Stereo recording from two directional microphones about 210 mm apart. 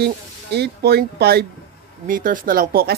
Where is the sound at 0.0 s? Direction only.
50° right (ahead or behind).